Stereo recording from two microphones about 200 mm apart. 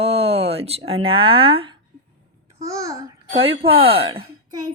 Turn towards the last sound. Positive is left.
turn(degrees=-30)  # may be behind; listen again after turning